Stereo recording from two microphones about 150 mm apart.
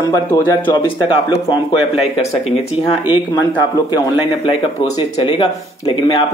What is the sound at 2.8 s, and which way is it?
Speech, 35° left (ahead or behind).